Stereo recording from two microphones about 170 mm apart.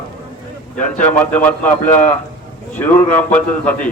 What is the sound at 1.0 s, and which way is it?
A man's voice, 10° left (ahead or behind).